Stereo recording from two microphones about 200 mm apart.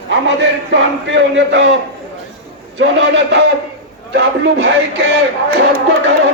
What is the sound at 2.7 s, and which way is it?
A man's voice, 65° right (ahead or behind).